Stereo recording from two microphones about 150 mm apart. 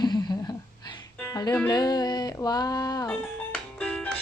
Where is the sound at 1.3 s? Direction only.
25° left (ahead or behind).